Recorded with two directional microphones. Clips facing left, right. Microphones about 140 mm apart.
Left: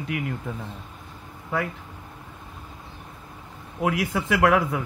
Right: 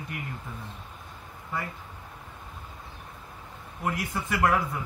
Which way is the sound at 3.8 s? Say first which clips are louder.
Left 6 dB; 90° left.